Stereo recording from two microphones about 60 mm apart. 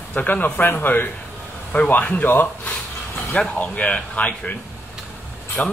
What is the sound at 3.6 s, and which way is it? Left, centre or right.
Speech, left.